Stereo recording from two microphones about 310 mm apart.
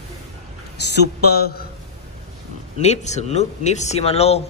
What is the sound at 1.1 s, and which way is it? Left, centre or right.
Speech, left.